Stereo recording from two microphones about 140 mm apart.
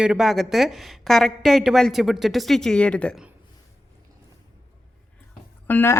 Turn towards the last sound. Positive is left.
turn(degrees=15)  # may be behind; listen again after turning